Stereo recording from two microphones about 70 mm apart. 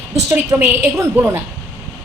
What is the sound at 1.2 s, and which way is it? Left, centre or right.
Speech, right.